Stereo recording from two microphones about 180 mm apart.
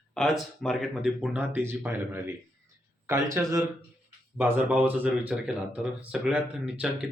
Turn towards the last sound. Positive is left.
turn(degrees=-5)  # may be behind; listen again after turning